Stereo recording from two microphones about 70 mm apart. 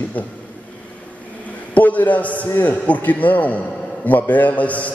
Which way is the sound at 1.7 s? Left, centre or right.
Left.